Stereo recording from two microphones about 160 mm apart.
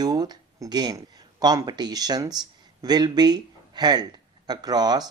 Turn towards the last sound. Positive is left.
turn(degrees=-25)  # may be behind; listen again after turning